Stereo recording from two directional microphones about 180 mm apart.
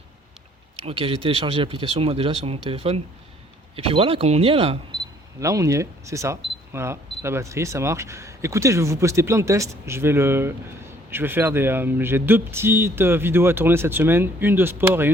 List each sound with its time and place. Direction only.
0.9 s speech: 30° right (ahead or behind); by 15.1 s 10° right (ahead or behind)